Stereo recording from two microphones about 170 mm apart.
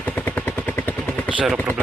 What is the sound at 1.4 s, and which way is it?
Speech, 5° right (ahead or behind).